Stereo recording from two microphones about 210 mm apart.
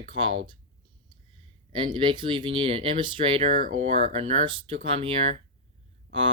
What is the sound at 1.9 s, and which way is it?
Speech, 25° right (ahead or behind).